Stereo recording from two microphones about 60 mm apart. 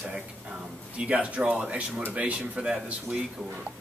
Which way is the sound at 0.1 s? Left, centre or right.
Centre.